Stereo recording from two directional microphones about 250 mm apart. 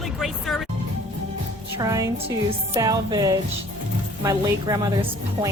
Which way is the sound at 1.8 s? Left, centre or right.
Centre.